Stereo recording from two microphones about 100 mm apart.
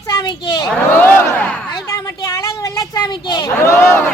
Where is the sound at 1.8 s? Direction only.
30° left (ahead or behind).